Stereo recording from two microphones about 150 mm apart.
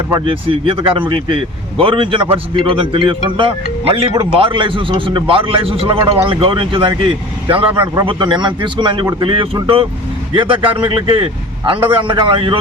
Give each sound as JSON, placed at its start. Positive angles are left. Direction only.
{"t": 0.1, "sound": "speech", "side_deg": -35}